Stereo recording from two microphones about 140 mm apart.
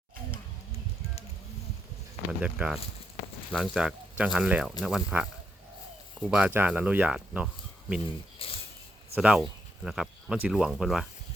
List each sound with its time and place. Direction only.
2.4 s speech: 10° right (ahead or behind)
6.3 s speech: 10° right (ahead or behind)
8.4 s a sound: 40° left (ahead or behind)
9.1 s speech: 5° right (ahead or behind)